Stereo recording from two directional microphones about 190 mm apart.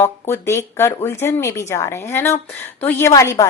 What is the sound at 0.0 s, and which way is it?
A woman's voice, 15° left (ahead or behind).